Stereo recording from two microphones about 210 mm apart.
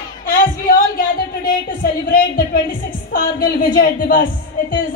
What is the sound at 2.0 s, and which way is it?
A woman's voice, 45° left (ahead or behind).